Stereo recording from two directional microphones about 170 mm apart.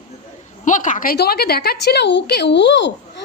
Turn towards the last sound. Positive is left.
turn(degrees=90)